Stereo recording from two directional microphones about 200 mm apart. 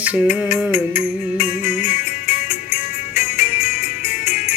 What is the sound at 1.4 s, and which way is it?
Music, 30° left (ahead or behind).